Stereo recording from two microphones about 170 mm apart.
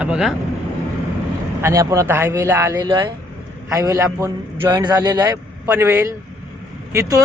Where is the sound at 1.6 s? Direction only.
20° right (ahead or behind).